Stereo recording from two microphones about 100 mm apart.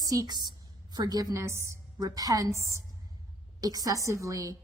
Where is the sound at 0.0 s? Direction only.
35° right (ahead or behind).